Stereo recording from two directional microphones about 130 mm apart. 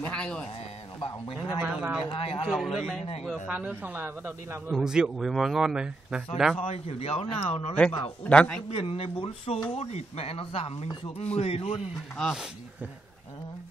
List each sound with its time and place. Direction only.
0.0 s speech: 10° left (ahead or behind)
1.6 s speech: 10° right (ahead or behind)
2.1 s speech: 50° left (ahead or behind)
2.4 s speech: centre (ahead or behind)
4.6 s speech: 5° right (ahead or behind)
6.6 s speech: 50° left (ahead or behind)
8.3 s speech: 10° left (ahead or behind)
8.6 s speech: 50° left (ahead or behind)
12.2 s speech: centre (ahead or behind)